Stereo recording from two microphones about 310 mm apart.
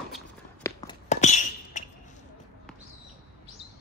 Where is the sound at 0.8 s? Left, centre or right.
Centre.